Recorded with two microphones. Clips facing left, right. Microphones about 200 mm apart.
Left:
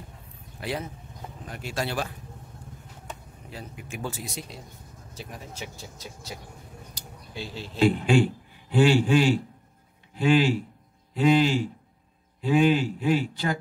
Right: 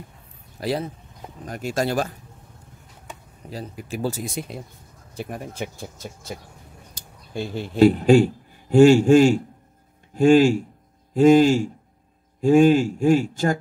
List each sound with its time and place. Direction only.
0.6 s a man's voice: 35° right (ahead or behind)
3.4 s speech: 35° right (ahead or behind)
4.2 s a man's voice: 55° right (ahead or behind)
7.3 s a man's voice: 55° right (ahead or behind)